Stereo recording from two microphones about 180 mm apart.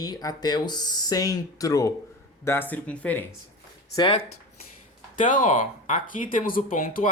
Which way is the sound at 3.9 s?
25° left (ahead or behind).